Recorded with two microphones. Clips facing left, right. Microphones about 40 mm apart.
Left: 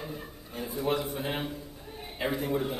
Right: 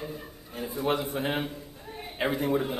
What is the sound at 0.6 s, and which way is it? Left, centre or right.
Speech, centre.